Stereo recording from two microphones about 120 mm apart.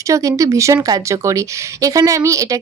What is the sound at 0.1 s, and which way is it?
A woman's voice, 25° right (ahead or behind).